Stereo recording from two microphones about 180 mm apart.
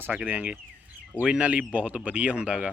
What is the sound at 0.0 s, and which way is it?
Speech, 5° right (ahead or behind).